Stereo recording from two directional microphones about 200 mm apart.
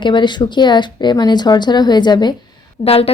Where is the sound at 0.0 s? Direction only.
25° left (ahead or behind).